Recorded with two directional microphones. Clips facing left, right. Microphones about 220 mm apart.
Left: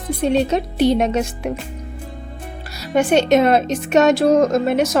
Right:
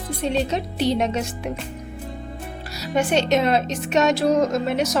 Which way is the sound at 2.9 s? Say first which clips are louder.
Left 5 dB; 55° left (ahead or behind).